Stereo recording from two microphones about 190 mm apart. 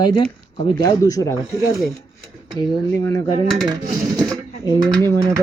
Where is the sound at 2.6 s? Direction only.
20° left (ahead or behind).